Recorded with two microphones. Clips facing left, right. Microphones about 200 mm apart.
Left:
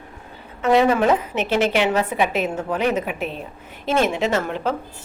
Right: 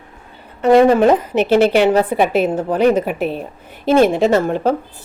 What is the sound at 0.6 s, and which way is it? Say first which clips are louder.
A woman's voice: right 6 dB; 40° right (ahead or behind).